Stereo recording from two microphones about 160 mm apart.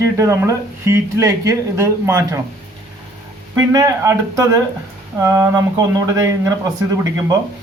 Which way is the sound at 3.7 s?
20° right (ahead or behind).